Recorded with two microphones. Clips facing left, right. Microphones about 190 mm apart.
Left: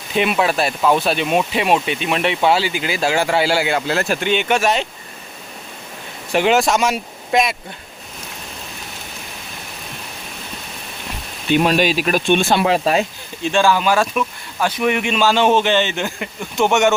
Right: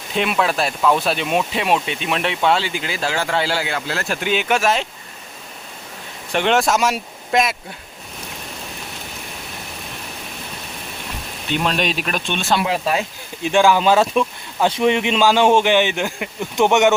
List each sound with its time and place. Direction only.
0.2 s speech: 5° left (ahead or behind)
3.8 s speech: 20° left (ahead or behind)
4.2 s speech: centre (ahead or behind)
6.3 s speech: 5° left (ahead or behind)
11.5 s speech: 5° left (ahead or behind)
12.3 s speech: 50° left (ahead or behind)
13.4 s speech: 15° right (ahead or behind)